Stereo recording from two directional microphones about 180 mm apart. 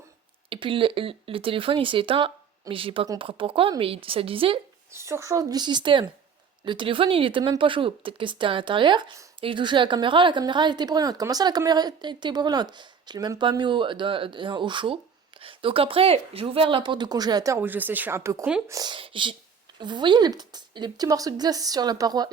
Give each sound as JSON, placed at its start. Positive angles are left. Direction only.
{"t": 0.5, "sound": "speech", "side_deg": -30}
{"t": 4.9, "sound": "speech", "side_deg": -15}